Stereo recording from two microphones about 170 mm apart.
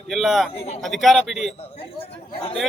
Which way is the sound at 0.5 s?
40° left (ahead or behind).